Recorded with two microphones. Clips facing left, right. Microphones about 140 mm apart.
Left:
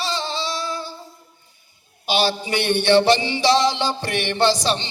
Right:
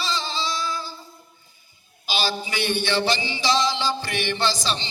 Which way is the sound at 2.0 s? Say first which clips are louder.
Left 6 dB; 60° left (ahead or behind).